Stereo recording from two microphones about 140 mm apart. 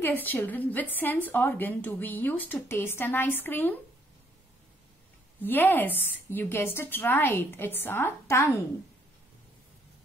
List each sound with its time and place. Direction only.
0.0 s a woman's voice: 15° left (ahead or behind)
5.4 s a woman's voice: 15° left (ahead or behind)